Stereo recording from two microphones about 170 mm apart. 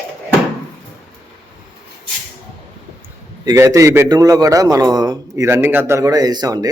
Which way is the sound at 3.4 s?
20° right (ahead or behind).